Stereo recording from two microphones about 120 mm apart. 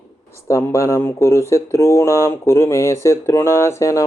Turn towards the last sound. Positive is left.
turn(degrees=25)  # may be behind; listen again after turning